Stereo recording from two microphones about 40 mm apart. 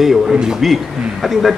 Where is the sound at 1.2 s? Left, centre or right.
Centre.